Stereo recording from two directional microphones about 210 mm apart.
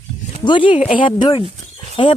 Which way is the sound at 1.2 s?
20° left (ahead or behind).